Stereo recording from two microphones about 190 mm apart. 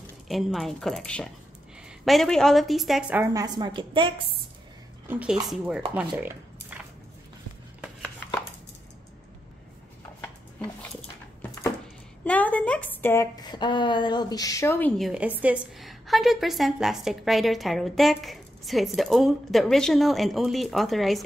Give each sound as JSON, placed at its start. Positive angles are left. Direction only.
{"t": 0.3, "sound": "a woman's voice", "side_deg": 0}
{"t": 3.3, "sound": "a woman's voice", "side_deg": -20}
{"t": 5.0, "sound": "a woman's voice", "side_deg": -10}
{"t": 5.9, "sound": "a sound", "side_deg": -10}
{"t": 10.2, "sound": "a sound", "side_deg": 10}
{"t": 12.3, "sound": "a woman's voice", "side_deg": 10}